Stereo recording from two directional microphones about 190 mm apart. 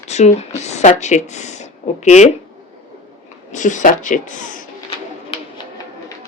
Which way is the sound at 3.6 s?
40° left (ahead or behind).